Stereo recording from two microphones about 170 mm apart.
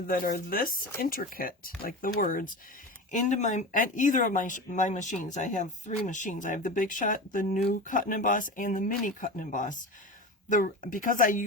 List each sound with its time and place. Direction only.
0.1 s speech: 55° left (ahead or behind)
3.1 s speech: 45° left (ahead or behind)